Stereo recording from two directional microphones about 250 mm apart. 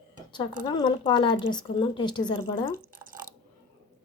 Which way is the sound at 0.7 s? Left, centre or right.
Centre.